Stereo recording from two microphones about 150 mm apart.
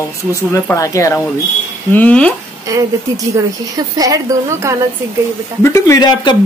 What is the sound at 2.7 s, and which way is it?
Speech, 20° right (ahead or behind).